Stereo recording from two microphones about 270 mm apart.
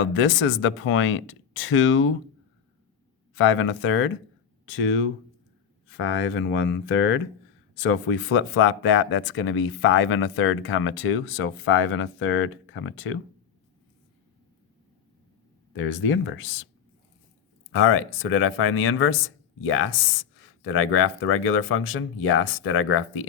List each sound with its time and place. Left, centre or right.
0.0 s speech: left
3.3 s speech: left
15.7 s speech: left
17.7 s speech: left